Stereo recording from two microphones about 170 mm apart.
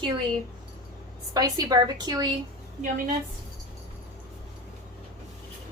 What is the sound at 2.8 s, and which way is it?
Speech, 55° right (ahead or behind).